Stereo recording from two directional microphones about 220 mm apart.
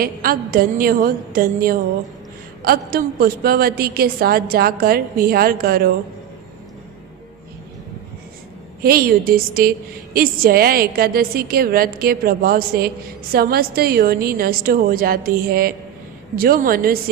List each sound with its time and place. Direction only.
0.0 s a woman's voice: 40° right (ahead or behind)
8.8 s a woman's voice: 45° right (ahead or behind)